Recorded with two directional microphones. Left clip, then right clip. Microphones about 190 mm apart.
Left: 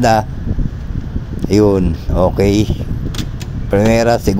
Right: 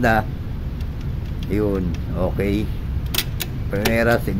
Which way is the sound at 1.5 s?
30° left (ahead or behind).